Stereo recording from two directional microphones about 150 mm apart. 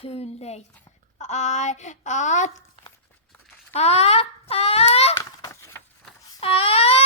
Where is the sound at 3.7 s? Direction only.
45° left (ahead or behind).